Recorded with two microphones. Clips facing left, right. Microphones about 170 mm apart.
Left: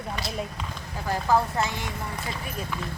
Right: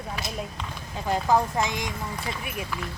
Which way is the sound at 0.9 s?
20° right (ahead or behind).